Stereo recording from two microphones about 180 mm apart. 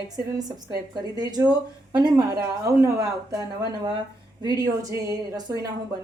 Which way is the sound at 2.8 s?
20° right (ahead or behind).